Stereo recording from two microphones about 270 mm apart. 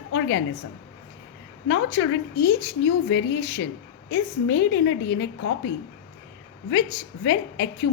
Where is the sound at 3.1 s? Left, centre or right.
Left.